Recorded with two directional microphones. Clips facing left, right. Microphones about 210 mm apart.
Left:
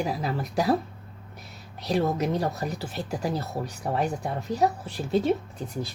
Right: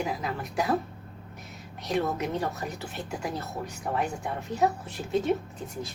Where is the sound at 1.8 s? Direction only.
35° left (ahead or behind).